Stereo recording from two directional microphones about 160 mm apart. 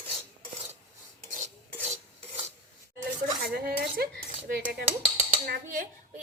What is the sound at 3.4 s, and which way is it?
Cutlery, 70° right (ahead or behind).